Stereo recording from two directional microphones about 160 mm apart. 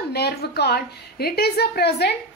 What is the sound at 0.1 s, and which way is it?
A woman's voice, 85° left.